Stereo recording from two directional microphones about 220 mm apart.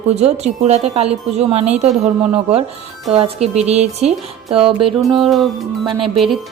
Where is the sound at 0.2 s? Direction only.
30° right (ahead or behind).